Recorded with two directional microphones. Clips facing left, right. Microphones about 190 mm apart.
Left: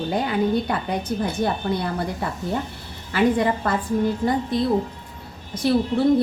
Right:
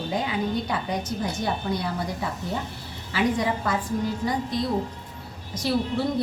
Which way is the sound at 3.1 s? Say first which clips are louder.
Left 5 dB; 55° left (ahead or behind).